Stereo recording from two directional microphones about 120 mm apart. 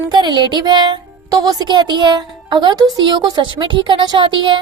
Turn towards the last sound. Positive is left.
turn(degrees=-40)  # may be behind; listen again after turning